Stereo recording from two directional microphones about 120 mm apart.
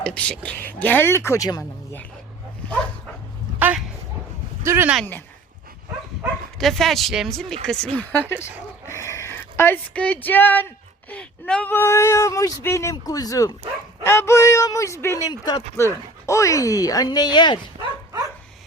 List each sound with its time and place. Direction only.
0.0 s speech: 10° left (ahead or behind); by 1.6 s 30° left (ahead or behind)
4.6 s speech: 20° right (ahead or behind)
6.6 s speech: centre (ahead or behind); by 15.3 s 25° left (ahead or behind)
15.3 s speech: 35° left (ahead or behind)